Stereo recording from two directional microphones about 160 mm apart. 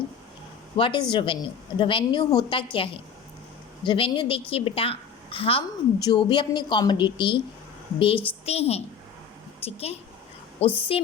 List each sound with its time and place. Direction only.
0.8 s a woman's voice: 30° left (ahead or behind)